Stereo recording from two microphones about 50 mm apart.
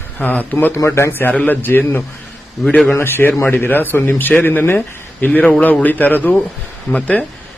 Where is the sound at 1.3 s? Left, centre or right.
Left.